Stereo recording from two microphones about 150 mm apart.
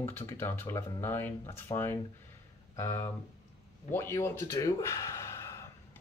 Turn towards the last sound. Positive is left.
turn(degrees=20)  # may be behind; listen again after turning